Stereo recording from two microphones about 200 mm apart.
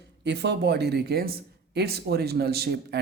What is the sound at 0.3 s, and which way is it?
Speech, 60° right (ahead or behind).